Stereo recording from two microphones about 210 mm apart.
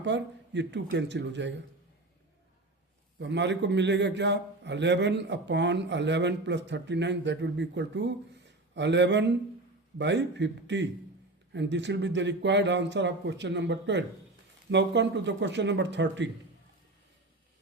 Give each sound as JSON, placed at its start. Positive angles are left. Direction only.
{"t": 0.0, "sound": "a man's voice", "side_deg": -55}
{"t": 3.2, "sound": "a man's voice", "side_deg": -55}